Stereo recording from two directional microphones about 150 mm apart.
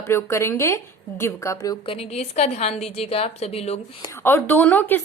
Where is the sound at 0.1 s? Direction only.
15° left (ahead or behind).